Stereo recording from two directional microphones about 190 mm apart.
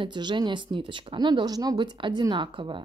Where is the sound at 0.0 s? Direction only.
25° right (ahead or behind).